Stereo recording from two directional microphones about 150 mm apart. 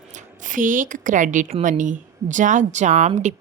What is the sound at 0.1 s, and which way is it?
A woman's voice, 55° right (ahead or behind).